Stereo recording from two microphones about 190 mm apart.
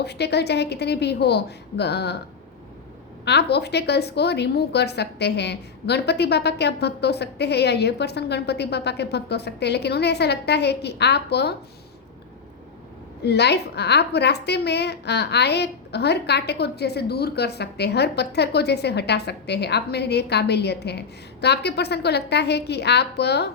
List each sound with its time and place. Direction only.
0.0 s a woman's voice: 60° left (ahead or behind)
3.2 s a woman's voice: 60° left (ahead or behind)
13.2 s a woman's voice: 60° left (ahead or behind)